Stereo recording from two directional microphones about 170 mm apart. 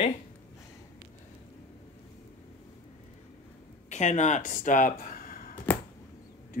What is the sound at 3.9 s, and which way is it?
Speech, 45° left (ahead or behind).